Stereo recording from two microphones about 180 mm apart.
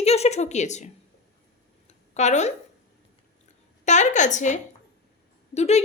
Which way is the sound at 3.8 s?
40° left (ahead or behind).